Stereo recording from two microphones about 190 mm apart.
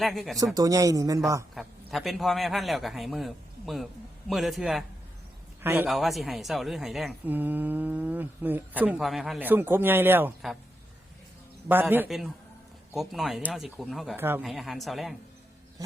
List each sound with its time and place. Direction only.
0.0 s a man's voice: centre (ahead or behind)
0.3 s a woman's voice: 20° right (ahead or behind)
1.5 s a man's voice: centre (ahead or behind)
5.9 s a woman's voice: centre (ahead or behind)
11.7 s a woman's voice: 10° right (ahead or behind)
14.2 s a woman's voice: 10° right (ahead or behind)
14.4 s a man's voice: centre (ahead or behind)